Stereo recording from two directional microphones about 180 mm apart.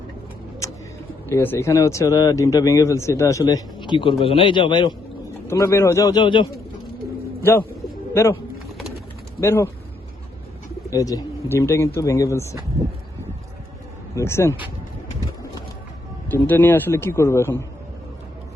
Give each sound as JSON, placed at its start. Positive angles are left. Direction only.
{"t": 1.3, "sound": "speech", "side_deg": 15}
{"t": 5.5, "sound": "speech", "side_deg": 15}
{"t": 8.1, "sound": "speech", "side_deg": 15}
{"t": 9.4, "sound": "speech", "side_deg": 15}
{"t": 10.8, "sound": "speech", "side_deg": 20}
{"t": 14.2, "sound": "speech", "side_deg": 15}
{"t": 16.3, "sound": "speech", "side_deg": 10}